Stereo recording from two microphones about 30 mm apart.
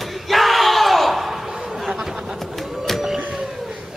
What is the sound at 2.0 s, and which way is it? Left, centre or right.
Chatter, centre.